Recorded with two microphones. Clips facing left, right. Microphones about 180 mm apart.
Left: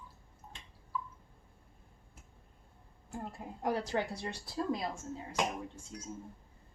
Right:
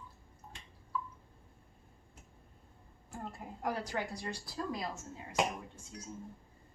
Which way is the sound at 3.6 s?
25° left (ahead or behind).